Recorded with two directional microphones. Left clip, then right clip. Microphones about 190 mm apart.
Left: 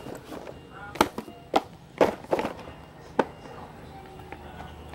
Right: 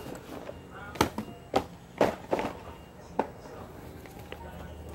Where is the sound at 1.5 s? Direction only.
40° left (ahead or behind).